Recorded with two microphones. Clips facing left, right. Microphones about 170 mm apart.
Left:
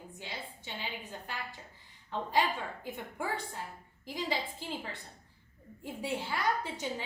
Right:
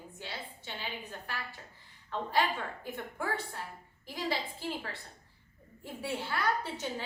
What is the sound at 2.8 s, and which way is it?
A woman's voice, 15° left (ahead or behind).